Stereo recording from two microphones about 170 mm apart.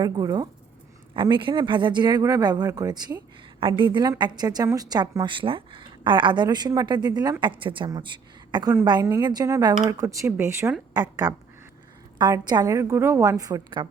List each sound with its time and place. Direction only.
0.0 s speech: 25° right (ahead or behind)
11.0 s speech: 20° right (ahead or behind)